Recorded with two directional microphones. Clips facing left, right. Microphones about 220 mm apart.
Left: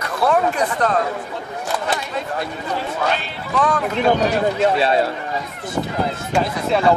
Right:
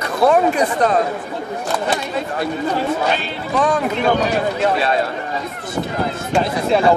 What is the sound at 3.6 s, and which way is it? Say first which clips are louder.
Speech: right 2 dB; 20° right (ahead or behind).